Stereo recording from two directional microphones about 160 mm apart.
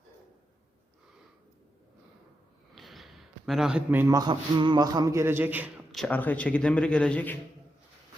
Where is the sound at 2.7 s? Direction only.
Centre (ahead or behind).